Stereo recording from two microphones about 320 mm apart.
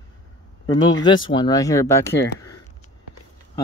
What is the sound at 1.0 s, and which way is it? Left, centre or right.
Speech, centre.